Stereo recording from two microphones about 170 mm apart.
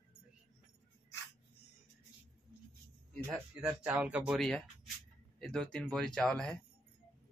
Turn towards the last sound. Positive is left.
turn(degrees=5)  # may be behind; listen again after turning